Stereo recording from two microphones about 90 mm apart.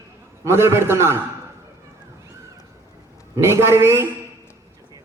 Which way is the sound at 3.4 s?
30° right (ahead or behind).